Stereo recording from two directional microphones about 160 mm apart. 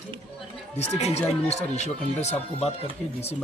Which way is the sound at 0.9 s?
40° left (ahead or behind).